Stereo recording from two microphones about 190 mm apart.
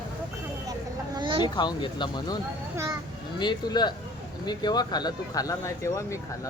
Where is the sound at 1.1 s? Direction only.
25° right (ahead or behind).